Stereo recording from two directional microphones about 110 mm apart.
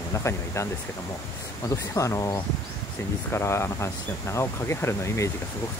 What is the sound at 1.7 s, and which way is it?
Speech, 30° left (ahead or behind).